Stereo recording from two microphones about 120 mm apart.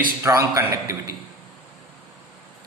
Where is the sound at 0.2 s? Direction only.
25° right (ahead or behind).